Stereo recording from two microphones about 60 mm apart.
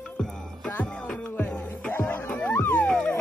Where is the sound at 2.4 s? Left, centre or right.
Left.